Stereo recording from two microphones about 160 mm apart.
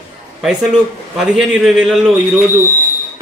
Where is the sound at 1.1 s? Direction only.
Centre (ahead or behind).